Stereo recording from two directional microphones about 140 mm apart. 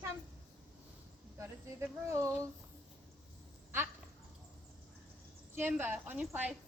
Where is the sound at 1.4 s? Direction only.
20° right (ahead or behind).